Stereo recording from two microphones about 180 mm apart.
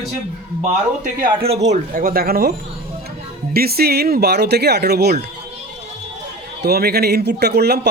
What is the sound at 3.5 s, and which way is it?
Speech, 60° right (ahead or behind).